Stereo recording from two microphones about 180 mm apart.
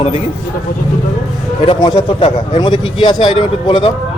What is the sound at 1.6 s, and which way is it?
A man's voice, 30° left (ahead or behind).